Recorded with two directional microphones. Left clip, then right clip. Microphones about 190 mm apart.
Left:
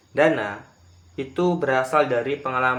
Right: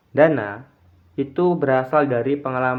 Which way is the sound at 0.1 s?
40° right (ahead or behind).